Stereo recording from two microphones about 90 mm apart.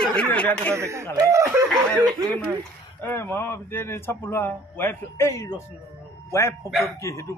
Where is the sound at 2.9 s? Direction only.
25° left (ahead or behind).